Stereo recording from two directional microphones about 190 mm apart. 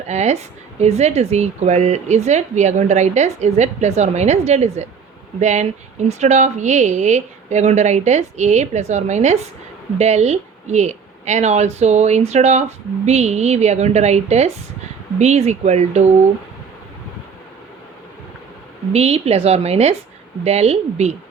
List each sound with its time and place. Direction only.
0.1 s speech: 35° right (ahead or behind)
18.9 s speech: 35° right (ahead or behind)